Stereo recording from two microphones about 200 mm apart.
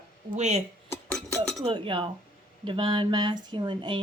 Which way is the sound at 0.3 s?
35° right (ahead or behind).